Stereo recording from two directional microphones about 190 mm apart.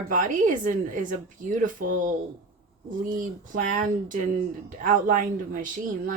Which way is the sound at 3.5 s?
45° right (ahead or behind).